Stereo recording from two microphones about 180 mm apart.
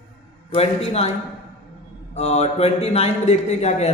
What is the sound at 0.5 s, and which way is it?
Speech, 35° left (ahead or behind).